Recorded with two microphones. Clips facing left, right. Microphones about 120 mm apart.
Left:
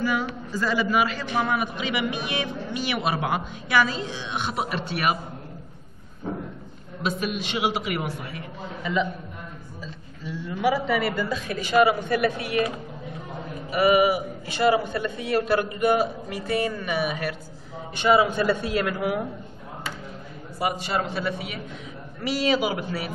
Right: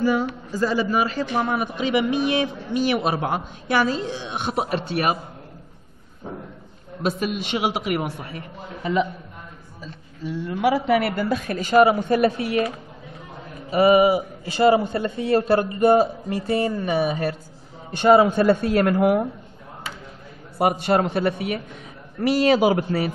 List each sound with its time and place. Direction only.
0.0 s a man's voice: 30° right (ahead or behind)
7.0 s a man's voice: 50° right (ahead or behind)
9.8 s a woman's voice: 55° right (ahead or behind)
11.5 s a man's voice: 35° right (ahead or behind)
13.7 s a man's voice: 30° right (ahead or behind)
17.9 s a man's voice: 45° right (ahead or behind)
20.5 s a man's voice: 55° right (ahead or behind)